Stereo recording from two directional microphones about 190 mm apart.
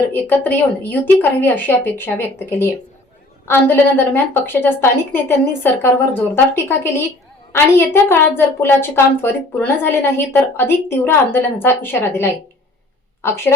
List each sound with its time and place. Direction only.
0.1 s a woman's voice: 10° left (ahead or behind)